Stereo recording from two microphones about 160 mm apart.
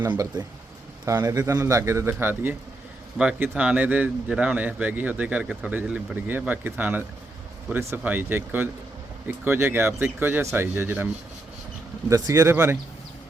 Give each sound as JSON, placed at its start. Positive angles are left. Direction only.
{"t": 0.1, "sound": "speech", "side_deg": -25}